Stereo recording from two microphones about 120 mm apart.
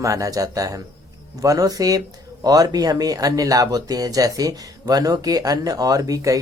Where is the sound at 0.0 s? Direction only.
25° right (ahead or behind).